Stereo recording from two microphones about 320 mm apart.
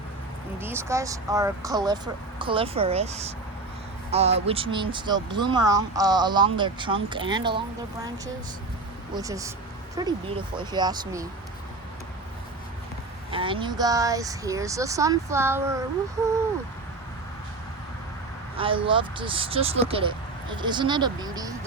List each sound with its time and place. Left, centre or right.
0.6 s speech: centre
9.1 s speech: centre
13.3 s speech: centre
18.5 s speech: centre